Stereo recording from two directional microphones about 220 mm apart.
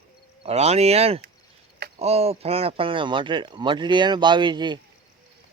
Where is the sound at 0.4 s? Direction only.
30° right (ahead or behind).